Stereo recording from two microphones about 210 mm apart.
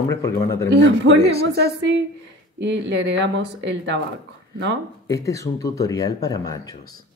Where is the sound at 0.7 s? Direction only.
55° right (ahead or behind).